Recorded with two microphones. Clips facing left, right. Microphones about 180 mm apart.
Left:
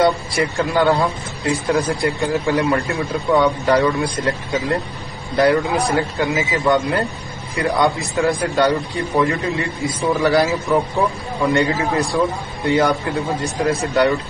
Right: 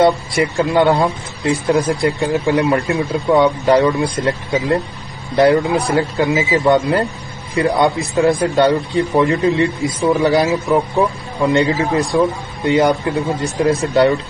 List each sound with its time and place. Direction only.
0.0 s a man's voice: 25° right (ahead or behind)